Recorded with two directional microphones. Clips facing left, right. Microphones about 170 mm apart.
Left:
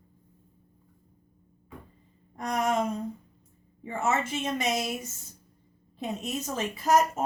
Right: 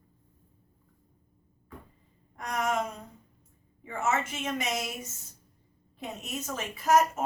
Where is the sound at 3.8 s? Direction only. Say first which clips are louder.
Left 2 dB; 30° left (ahead or behind).